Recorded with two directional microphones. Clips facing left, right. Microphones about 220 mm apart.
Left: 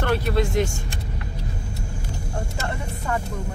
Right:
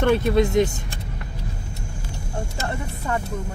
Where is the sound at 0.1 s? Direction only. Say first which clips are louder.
Right 2 dB; 20° right (ahead or behind).